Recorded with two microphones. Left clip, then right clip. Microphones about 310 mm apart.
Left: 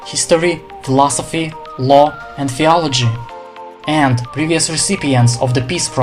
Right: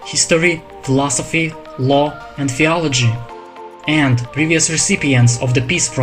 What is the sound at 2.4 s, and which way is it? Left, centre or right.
Speech, centre.